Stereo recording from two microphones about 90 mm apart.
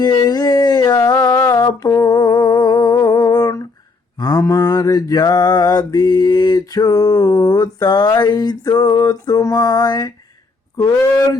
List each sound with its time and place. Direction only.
0.0 s a sound: 50° left (ahead or behind)
4.2 s mantra: 45° left (ahead or behind)
10.8 s speech: 35° left (ahead or behind)